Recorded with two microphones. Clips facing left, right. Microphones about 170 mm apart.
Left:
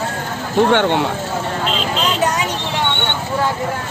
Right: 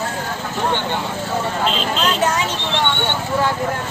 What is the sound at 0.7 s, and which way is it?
Speech, 75° left (ahead or behind).